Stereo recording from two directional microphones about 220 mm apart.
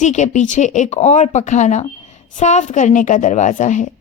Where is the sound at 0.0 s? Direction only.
35° left (ahead or behind).